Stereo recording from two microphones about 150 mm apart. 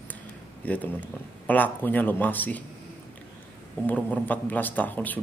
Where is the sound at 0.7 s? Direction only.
10° left (ahead or behind).